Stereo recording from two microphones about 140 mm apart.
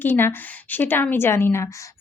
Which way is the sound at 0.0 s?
15° left (ahead or behind).